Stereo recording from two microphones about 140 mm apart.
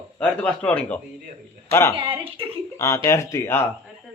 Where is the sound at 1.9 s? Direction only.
35° right (ahead or behind).